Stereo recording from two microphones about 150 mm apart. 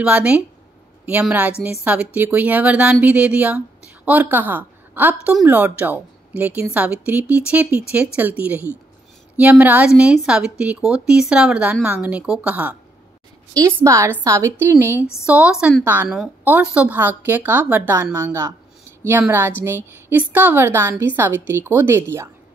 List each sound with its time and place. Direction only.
0.0 s speech: 10° right (ahead or behind)
1.6 s speech: 10° right (ahead or behind)